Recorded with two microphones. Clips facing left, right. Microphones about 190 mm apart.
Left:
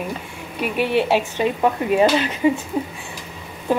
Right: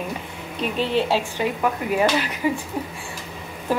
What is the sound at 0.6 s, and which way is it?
Speech, 15° left (ahead or behind).